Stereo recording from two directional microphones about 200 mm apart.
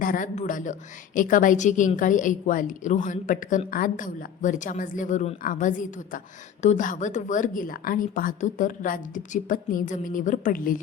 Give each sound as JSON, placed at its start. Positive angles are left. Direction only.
{"t": 0.0, "sound": "a woman's voice", "side_deg": 40}